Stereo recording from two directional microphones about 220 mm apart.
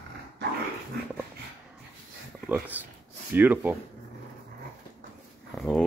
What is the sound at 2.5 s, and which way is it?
Speech, 10° right (ahead or behind).